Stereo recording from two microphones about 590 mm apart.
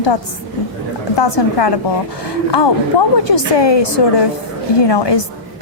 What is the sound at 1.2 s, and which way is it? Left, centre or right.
Speech, left.